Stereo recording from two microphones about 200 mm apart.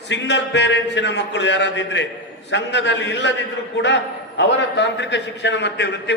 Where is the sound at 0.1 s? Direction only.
65° left (ahead or behind).